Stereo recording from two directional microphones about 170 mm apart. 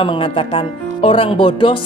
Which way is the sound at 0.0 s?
30° left (ahead or behind).